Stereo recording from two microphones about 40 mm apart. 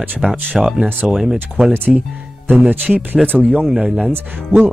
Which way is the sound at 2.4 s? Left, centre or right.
Right.